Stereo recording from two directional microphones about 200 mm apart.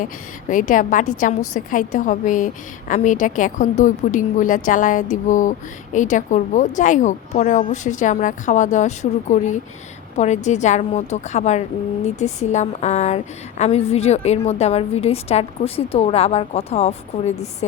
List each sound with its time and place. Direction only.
0.0 s a woman's voice: 40° left (ahead or behind)